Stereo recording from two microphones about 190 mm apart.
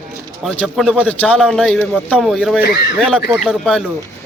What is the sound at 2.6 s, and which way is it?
Speech, 55° left (ahead or behind).